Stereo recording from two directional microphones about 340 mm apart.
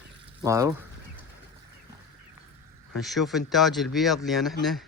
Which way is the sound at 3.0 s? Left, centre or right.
Centre.